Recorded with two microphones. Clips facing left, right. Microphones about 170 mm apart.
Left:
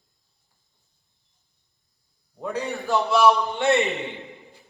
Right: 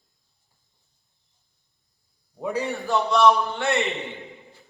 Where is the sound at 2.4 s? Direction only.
Centre (ahead or behind).